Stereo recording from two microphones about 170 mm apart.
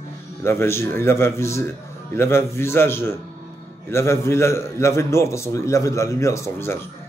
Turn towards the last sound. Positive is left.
turn(degrees=15)  # may be behind; listen again after turning